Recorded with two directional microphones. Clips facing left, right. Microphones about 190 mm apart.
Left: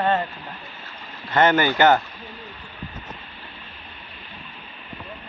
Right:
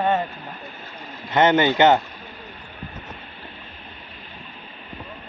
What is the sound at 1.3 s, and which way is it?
Speech, 20° right (ahead or behind).